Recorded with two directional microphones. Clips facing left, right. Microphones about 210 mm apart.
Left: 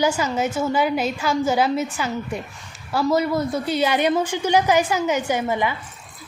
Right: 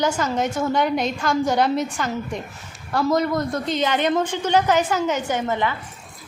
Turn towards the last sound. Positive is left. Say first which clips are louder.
# left 1 dB
turn(degrees=10)  # may be behind; listen again after turning